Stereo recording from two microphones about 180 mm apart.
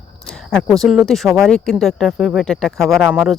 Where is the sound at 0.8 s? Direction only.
Centre (ahead or behind).